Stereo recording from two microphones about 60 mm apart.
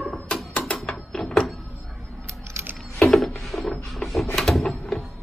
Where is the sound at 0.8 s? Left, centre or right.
Centre.